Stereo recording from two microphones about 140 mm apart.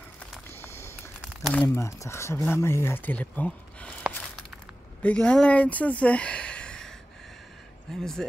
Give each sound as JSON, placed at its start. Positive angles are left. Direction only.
{"t": 0.2, "sound": "a sound", "side_deg": 15}
{"t": 1.2, "sound": "crumpling", "side_deg": 5}
{"t": 1.7, "sound": "speech", "side_deg": 20}
{"t": 5.0, "sound": "speech", "side_deg": 5}